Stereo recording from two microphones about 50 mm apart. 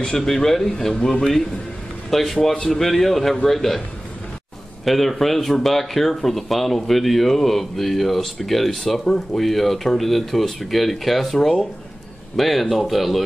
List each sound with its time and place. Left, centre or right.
0.0 s speech: centre
4.8 s speech: centre